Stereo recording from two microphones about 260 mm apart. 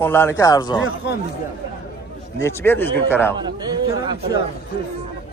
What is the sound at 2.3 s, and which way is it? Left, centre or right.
A man's voice, centre.